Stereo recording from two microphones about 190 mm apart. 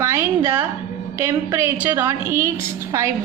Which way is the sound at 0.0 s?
15° right (ahead or behind).